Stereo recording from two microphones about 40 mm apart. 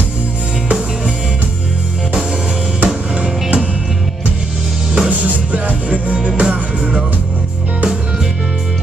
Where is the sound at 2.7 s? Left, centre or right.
Right.